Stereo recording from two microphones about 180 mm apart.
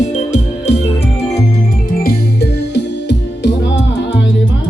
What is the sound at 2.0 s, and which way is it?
Music, 65° left (ahead or behind).